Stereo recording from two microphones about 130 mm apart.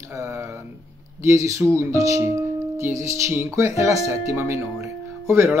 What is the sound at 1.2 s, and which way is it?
Speech, 25° right (ahead or behind).